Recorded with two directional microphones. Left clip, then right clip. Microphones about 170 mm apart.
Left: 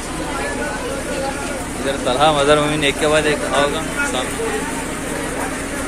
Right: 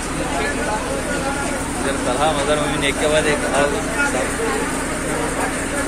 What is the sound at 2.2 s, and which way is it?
Speech, 65° left (ahead or behind).